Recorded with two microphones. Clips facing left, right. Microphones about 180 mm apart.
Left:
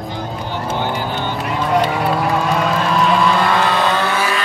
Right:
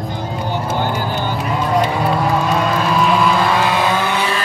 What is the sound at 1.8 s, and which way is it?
Vehicle, centre (ahead or behind).